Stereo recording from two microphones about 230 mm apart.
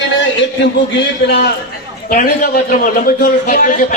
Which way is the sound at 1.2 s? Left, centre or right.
Left.